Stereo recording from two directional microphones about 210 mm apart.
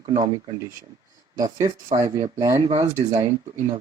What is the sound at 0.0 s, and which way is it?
Speech, 20° right (ahead or behind).